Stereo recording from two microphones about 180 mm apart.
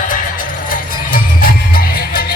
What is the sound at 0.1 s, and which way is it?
Music, 50° left (ahead or behind).